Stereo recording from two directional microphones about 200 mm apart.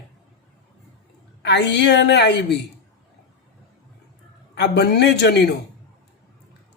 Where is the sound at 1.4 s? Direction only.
60° left (ahead or behind).